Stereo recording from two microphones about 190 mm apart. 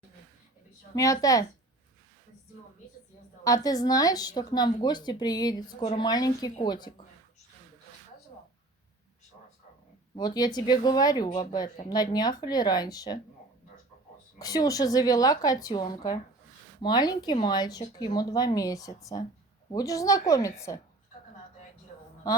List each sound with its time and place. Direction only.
0.9 s a woman's voice: 15° left (ahead or behind)
3.4 s speech: 20° left (ahead or behind)
10.2 s speech: 20° left (ahead or behind)
14.3 s a woman's voice: 20° left (ahead or behind)